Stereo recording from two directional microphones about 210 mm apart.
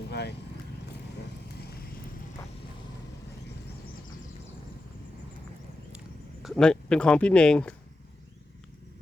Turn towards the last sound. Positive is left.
turn(degrees=5)  # may be behind; listen again after turning